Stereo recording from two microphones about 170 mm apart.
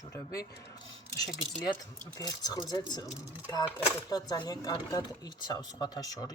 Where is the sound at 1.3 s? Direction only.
Centre (ahead or behind).